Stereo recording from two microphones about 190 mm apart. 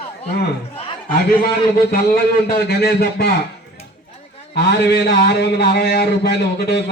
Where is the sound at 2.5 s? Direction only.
55° left (ahead or behind).